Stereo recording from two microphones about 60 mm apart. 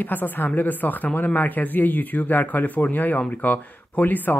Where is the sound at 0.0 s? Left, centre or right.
Left.